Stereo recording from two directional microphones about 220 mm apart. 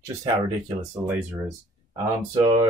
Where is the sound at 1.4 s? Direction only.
20° right (ahead or behind).